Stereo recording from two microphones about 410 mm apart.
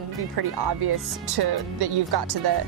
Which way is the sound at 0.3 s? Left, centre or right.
Right.